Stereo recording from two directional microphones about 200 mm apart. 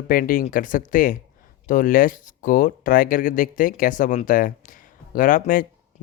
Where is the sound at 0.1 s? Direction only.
45° left (ahead or behind).